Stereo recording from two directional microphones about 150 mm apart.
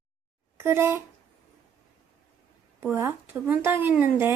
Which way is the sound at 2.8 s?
15° right (ahead or behind).